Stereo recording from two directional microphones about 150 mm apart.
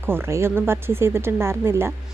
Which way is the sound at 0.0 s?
15° right (ahead or behind).